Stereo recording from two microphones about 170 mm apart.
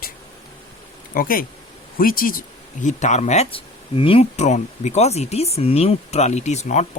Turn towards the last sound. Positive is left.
turn(degrees=40)  # may be behind; listen again after turning